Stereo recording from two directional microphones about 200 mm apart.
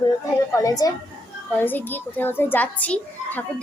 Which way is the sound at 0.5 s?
20° left (ahead or behind).